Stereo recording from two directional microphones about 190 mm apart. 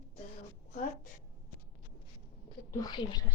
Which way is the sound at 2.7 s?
20° left (ahead or behind).